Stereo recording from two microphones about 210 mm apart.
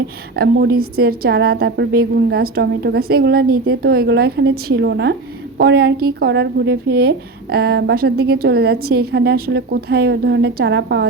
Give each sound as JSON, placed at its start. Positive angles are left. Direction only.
{"t": 0.3, "sound": "a woman's voice", "side_deg": -50}